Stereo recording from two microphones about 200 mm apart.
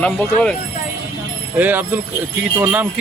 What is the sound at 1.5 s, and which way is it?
Speech, 10° right (ahead or behind).